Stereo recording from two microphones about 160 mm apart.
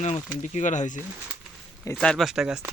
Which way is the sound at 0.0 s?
45° left (ahead or behind).